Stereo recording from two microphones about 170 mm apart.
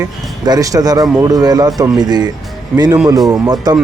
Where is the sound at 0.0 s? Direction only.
20° right (ahead or behind).